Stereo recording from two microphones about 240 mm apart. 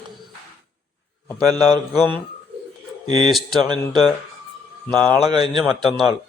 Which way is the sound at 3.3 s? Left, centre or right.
Centre.